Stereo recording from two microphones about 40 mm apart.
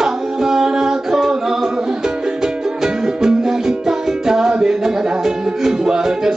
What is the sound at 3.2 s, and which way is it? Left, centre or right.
Music, centre.